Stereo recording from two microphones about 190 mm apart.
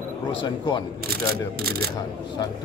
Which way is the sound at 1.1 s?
55° right (ahead or behind).